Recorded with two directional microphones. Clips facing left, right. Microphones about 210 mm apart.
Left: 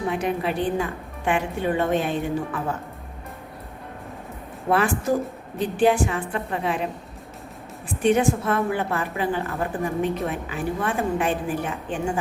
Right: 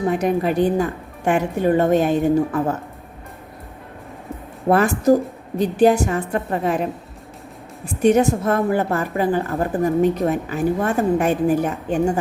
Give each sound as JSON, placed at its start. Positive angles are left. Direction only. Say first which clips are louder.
{"t": 0.1, "sound": "a woman's voice", "louder": "right 5 dB", "side_deg": -45}
{"t": 4.7, "sound": "a woman's voice", "louder": "right 6 dB", "side_deg": -40}
{"t": 8.0, "sound": "a woman's voice", "louder": "right 4 dB", "side_deg": -40}